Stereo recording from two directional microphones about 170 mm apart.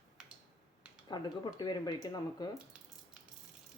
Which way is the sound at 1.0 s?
25° left (ahead or behind).